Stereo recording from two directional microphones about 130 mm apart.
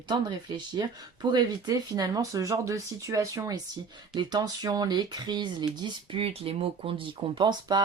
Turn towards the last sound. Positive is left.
turn(degrees=-35)  # may be behind; listen again after turning